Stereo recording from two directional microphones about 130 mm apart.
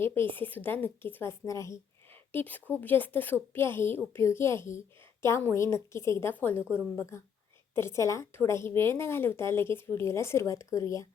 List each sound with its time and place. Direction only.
0.0 s a woman's voice: 20° left (ahead or behind)
2.3 s a woman's voice: 15° left (ahead or behind)